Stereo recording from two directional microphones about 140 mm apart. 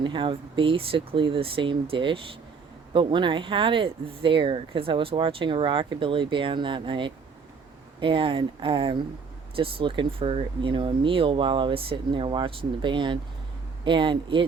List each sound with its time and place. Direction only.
0.0 s speech: 35° right (ahead or behind)